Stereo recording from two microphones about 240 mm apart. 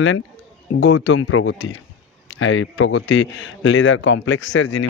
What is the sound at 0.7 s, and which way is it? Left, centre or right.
A man's voice, left.